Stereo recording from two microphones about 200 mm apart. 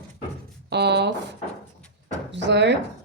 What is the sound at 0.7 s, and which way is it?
Speech, 55° right (ahead or behind).